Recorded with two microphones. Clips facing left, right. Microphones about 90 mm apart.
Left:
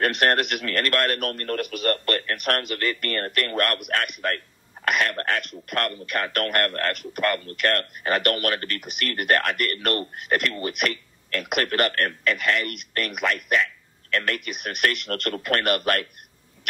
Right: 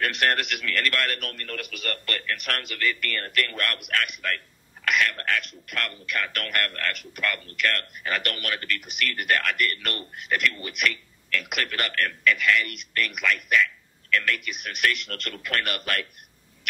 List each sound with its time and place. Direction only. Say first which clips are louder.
0.0 s a man's voice: left 4 dB; 45° left (ahead or behind)